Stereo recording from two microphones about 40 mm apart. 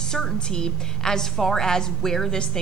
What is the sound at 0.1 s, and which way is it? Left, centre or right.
A woman's voice, centre.